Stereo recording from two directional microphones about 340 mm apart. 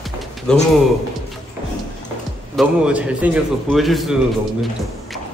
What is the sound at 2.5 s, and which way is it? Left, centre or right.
Speech, centre.